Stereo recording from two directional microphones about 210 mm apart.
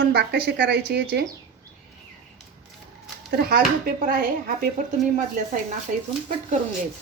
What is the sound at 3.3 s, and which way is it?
Speech, 45° right (ahead or behind).